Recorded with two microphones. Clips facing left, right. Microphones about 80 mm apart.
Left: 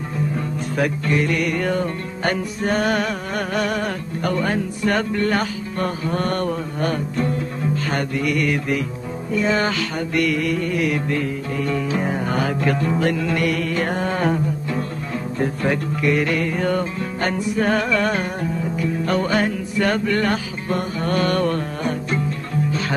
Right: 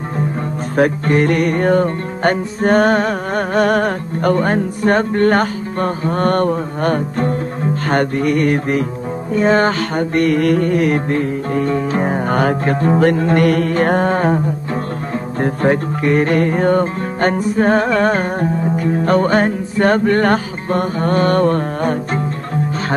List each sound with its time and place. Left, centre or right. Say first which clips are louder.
0.7 s music: right 7 dB; right
15.3 s speech: right 6 dB; right
15.7 s music: right 5 dB; right